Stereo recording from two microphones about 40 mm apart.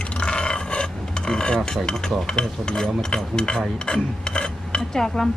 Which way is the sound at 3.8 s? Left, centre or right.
Centre.